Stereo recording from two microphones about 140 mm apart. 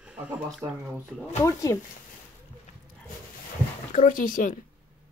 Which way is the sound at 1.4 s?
20° left (ahead or behind).